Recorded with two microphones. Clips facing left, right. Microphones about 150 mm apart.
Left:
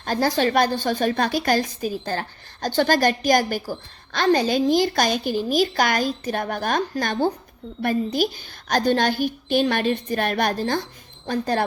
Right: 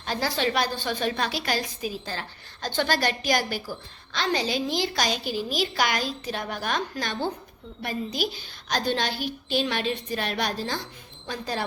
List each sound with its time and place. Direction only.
0.0 s a woman's voice: 45° left (ahead or behind)